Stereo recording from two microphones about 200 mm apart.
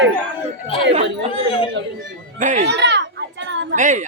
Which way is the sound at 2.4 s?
35° right (ahead or behind).